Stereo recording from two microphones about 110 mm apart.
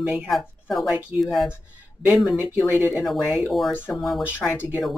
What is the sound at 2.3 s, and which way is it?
Speech, 15° right (ahead or behind).